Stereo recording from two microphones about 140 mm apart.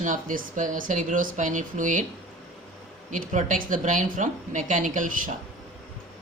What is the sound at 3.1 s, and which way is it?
Speech, 65° right (ahead or behind).